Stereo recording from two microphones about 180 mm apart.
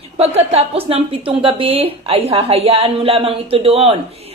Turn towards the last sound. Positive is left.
turn(degrees=-30)  # may be behind; listen again after turning